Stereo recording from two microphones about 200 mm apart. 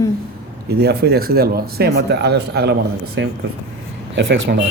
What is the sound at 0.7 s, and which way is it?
Speech, 55° right (ahead or behind).